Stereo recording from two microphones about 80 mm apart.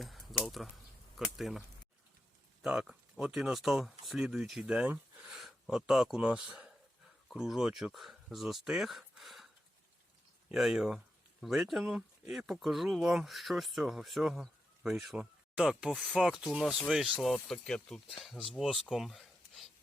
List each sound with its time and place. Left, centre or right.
0.0 s a sound: centre
1.1 s speech: centre
2.6 s speech: centre
5.2 s a sound: centre
6.2 s speech: centre
10.5 s speech: centre
11.8 s speech: centre
12.2 s speech: centre